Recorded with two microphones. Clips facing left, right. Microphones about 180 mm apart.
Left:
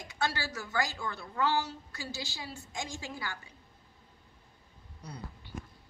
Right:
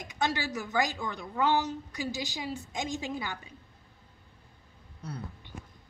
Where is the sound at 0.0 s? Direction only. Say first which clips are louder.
Right 3 dB; 20° right (ahead or behind).